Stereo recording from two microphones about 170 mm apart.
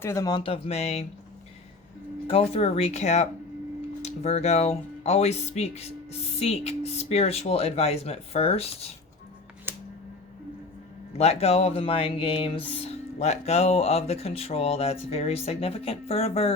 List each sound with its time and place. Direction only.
0.0 s speech: 15° left (ahead or behind); by 1.0 s 40° left (ahead or behind)
2.2 s speech: 35° left (ahead or behind)
9.7 s a sound: 10° right (ahead or behind)
11.2 s speech: 35° left (ahead or behind)